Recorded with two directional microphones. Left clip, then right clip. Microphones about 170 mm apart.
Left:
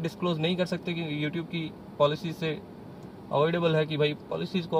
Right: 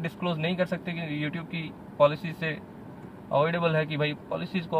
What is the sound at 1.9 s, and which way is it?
Speech, 40° right (ahead or behind).